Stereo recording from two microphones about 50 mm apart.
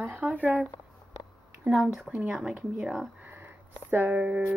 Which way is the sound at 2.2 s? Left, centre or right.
Centre.